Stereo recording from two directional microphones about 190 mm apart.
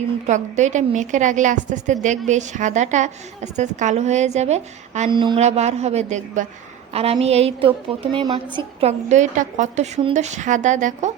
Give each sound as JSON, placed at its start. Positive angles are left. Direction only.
{"t": 0.3, "sound": "a woman's voice", "side_deg": -40}
{"t": 5.1, "sound": "a woman's voice", "side_deg": -25}